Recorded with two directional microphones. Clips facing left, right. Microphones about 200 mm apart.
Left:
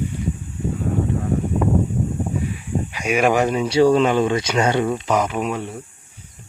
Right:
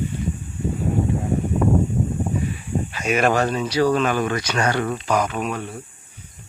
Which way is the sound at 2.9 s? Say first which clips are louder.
Left 2 dB; 10° left (ahead or behind).